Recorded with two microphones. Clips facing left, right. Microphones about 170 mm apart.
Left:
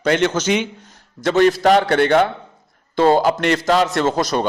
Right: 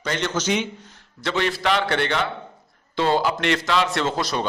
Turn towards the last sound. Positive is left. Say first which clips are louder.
# left 6 dB
turn(degrees=45)  # may be behind; listen again after turning